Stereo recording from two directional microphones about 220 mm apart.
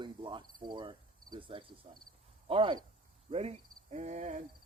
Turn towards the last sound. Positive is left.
turn(degrees=-30)  # may be behind; listen again after turning